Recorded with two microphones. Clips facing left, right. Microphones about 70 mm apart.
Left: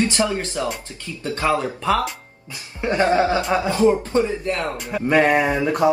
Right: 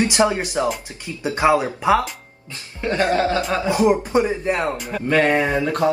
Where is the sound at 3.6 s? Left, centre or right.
Centre.